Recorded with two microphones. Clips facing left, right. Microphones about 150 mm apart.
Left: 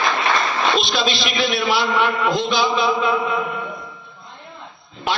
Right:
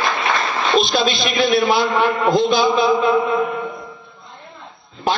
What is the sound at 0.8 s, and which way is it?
A man's voice, 50° right (ahead or behind).